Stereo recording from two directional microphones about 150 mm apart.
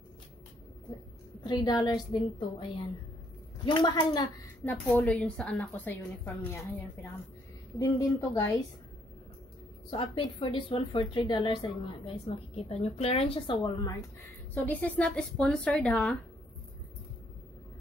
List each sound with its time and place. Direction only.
1.4 s a woman's voice: 30° left (ahead or behind)
4.6 s a woman's voice: 10° left (ahead or behind)
9.8 s a woman's voice: 35° left (ahead or behind)
14.5 s a woman's voice: 10° left (ahead or behind)